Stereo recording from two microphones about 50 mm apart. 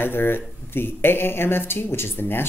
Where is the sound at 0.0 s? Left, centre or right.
Left.